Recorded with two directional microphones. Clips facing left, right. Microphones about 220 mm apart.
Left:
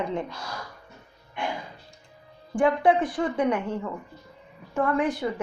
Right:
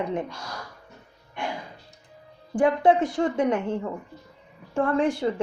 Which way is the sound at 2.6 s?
20° right (ahead or behind).